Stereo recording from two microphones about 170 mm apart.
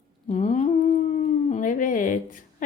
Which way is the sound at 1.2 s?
50° left (ahead or behind).